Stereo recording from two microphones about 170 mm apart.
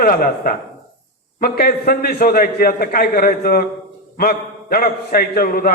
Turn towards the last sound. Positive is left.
turn(degrees=60)  # may be behind; listen again after turning